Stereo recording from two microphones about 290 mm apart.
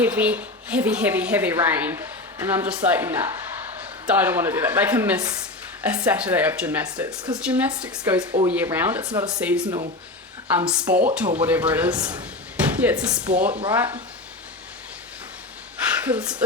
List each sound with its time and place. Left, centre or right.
0.0 s a woman's voice: centre
13.5 s speech: centre
13.7 s speech: centre
16.0 s a woman's voice: centre